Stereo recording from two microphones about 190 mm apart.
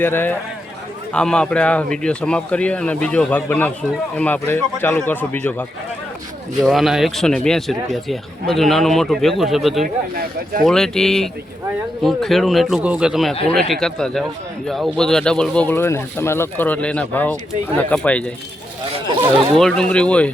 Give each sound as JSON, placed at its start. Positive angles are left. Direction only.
{"t": 0.0, "sound": "speech", "side_deg": 10}
{"t": 6.6, "sound": "speech", "side_deg": 0}
{"t": 9.8, "sound": "speech", "side_deg": -50}
{"t": 10.7, "sound": "speech", "side_deg": 5}
{"t": 19.5, "sound": "speech", "side_deg": 5}